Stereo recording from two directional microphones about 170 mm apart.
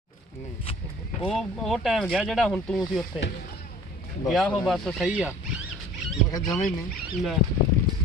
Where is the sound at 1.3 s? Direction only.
Centre (ahead or behind).